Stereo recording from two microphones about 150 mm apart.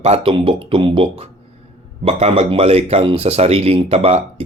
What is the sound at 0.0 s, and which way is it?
Speech, 40° right (ahead or behind).